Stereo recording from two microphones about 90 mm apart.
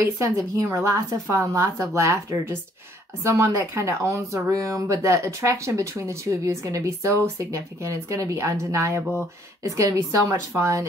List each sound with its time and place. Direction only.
0.2 s speech: 35° right (ahead or behind)
0.7 s a woman's voice: 25° right (ahead or behind)
1.4 s a woman's voice: 35° right (ahead or behind)